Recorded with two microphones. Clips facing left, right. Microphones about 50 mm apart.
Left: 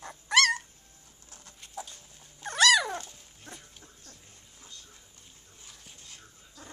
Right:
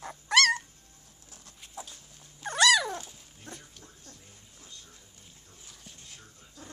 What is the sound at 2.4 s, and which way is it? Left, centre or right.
Dog, centre.